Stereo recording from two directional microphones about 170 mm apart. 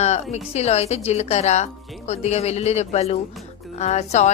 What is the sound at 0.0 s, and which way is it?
A woman's voice, 40° left (ahead or behind).